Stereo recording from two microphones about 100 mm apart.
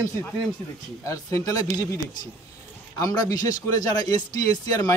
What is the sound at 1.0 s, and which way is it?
Speech, 35° left (ahead or behind).